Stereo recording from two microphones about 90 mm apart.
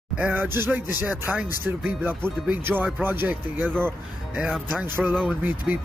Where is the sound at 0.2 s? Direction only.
20° right (ahead or behind).